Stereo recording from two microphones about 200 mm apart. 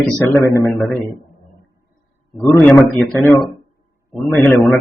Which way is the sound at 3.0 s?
Centre (ahead or behind).